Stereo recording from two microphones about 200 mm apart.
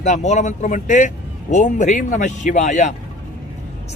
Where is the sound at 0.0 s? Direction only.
35° left (ahead or behind).